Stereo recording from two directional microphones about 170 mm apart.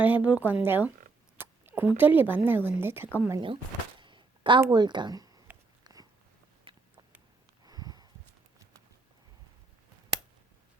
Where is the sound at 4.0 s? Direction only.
30° right (ahead or behind).